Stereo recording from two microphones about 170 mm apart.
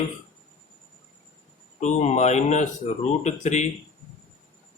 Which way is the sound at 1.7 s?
45° left (ahead or behind).